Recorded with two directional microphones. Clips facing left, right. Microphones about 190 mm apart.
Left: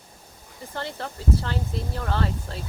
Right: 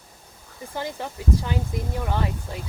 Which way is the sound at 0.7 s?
15° right (ahead or behind).